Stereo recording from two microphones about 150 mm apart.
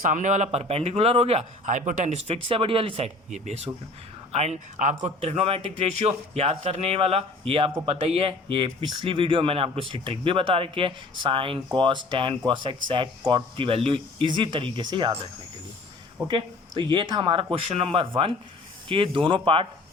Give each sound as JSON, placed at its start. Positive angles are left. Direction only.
{"t": 0.0, "sound": "speech", "side_deg": -55}
{"t": 3.2, "sound": "speech", "side_deg": -50}
{"t": 16.2, "sound": "speech", "side_deg": -35}